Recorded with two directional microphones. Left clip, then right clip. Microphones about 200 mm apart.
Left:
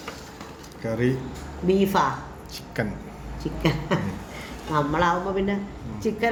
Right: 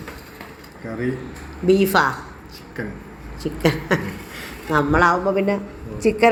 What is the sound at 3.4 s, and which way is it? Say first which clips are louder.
Speech: right 5 dB; 40° right (ahead or behind).